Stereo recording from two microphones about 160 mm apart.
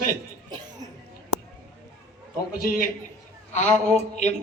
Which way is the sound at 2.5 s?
65° left (ahead or behind).